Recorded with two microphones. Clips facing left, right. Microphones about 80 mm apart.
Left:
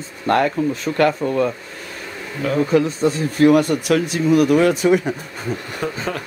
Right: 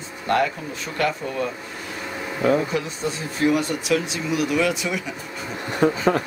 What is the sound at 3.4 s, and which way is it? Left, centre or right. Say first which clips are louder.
Speech: left 6 dB; left.